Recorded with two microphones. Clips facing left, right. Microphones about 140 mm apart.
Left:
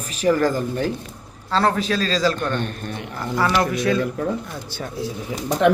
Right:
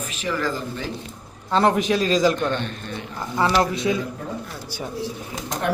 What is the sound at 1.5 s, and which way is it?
Speech, 15° right (ahead or behind).